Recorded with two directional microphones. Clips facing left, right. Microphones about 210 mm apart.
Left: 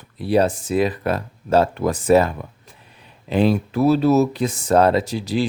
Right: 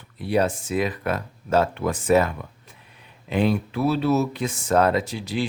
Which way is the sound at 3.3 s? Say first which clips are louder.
Left 4 dB; 35° left (ahead or behind).